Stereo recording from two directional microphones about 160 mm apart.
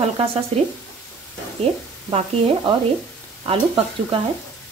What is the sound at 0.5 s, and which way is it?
Speech, 40° right (ahead or behind).